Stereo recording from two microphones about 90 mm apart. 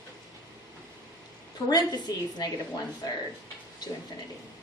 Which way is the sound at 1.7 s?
50° left (ahead or behind).